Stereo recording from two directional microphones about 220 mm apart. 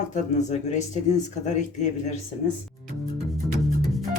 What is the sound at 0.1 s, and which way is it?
Speech, 35° left (ahead or behind).